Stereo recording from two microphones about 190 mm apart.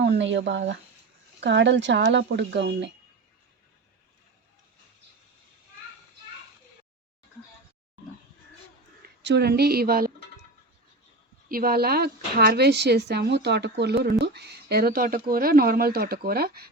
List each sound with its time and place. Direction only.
0.0 s speech: 65° right (ahead or behind)
9.2 s speech: 60° right (ahead or behind)
11.4 s speech: 50° right (ahead or behind)